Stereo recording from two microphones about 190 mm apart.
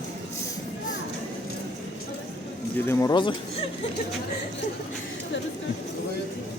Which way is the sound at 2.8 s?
20° left (ahead or behind).